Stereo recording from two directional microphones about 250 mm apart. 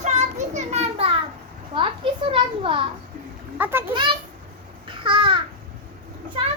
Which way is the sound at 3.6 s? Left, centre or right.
Centre.